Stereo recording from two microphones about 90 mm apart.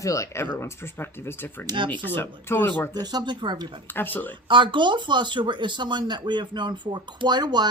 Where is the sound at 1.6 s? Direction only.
60° right (ahead or behind).